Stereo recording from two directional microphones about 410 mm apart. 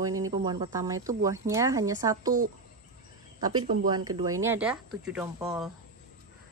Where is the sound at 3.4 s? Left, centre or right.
Centre.